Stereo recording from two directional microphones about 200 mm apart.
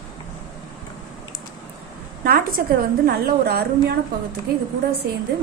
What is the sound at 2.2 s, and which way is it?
A woman's voice, 45° right (ahead or behind).